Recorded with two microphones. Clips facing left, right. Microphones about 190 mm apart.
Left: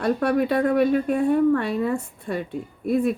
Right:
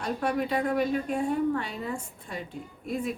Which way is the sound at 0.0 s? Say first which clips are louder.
Left 8 dB; 65° left (ahead or behind).